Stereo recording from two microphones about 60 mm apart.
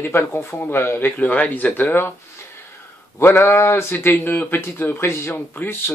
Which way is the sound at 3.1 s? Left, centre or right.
Left.